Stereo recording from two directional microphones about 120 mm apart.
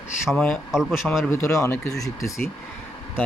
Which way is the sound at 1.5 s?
25° left (ahead or behind).